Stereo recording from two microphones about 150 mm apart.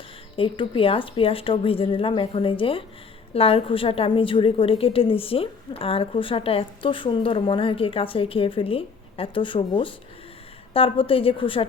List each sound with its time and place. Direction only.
0.3 s a woman's voice: 35° left (ahead or behind)